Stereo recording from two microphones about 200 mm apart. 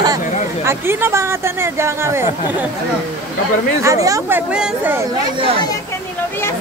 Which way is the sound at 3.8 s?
15° right (ahead or behind).